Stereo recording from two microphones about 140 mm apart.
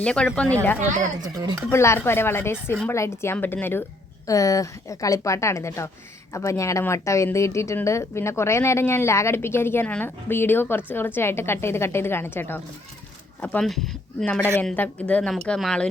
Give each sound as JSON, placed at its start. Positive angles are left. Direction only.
{"t": 0.0, "sound": "speech", "side_deg": 10}
{"t": 1.7, "sound": "a woman's voice", "side_deg": 20}